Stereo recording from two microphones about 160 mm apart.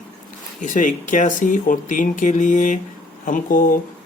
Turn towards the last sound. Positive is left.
turn(degrees=60)  # may be behind; listen again after turning